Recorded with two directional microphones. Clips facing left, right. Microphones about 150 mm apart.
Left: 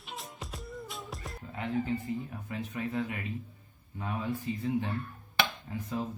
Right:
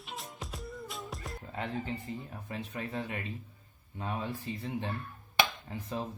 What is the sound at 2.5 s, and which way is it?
Speech, 25° right (ahead or behind).